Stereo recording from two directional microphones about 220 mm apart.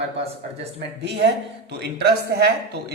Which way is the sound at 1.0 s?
50° right (ahead or behind).